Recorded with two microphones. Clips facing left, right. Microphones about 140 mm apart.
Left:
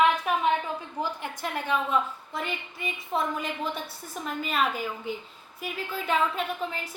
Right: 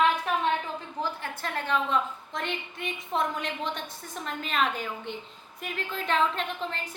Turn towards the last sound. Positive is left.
turn(degrees=10)  # may be behind; listen again after turning